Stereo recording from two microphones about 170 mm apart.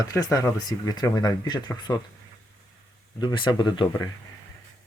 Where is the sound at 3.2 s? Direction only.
25° left (ahead or behind).